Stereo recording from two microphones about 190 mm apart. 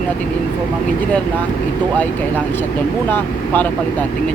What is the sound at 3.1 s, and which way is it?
Speech, 10° left (ahead or behind).